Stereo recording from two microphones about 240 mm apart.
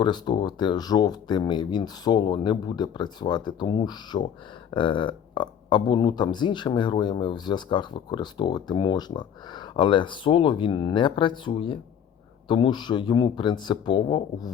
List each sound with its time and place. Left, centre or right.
0.0 s speech: centre